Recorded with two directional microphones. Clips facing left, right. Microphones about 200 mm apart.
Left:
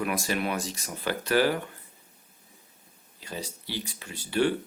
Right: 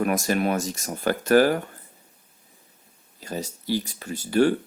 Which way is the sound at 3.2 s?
45° right (ahead or behind).